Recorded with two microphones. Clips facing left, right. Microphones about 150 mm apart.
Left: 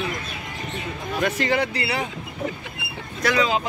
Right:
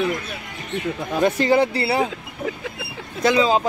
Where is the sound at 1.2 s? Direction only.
30° right (ahead or behind).